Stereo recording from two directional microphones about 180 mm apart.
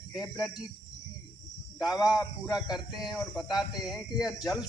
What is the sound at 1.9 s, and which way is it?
Speech, 20° left (ahead or behind).